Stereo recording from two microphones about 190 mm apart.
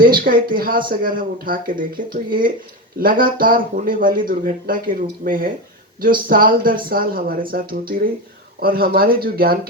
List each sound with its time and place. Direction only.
0.0 s speech: 50° right (ahead or behind)